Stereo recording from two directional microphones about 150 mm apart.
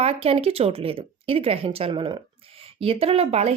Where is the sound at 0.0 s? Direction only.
40° right (ahead or behind).